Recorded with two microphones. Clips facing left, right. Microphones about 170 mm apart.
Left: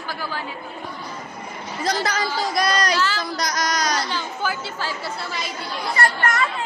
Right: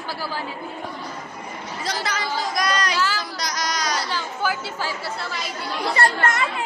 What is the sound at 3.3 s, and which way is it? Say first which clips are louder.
Speech: left 3 dB; 50° left (ahead or behind).